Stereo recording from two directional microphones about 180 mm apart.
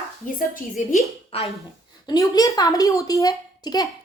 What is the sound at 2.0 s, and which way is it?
A woman's voice, 20° left (ahead or behind).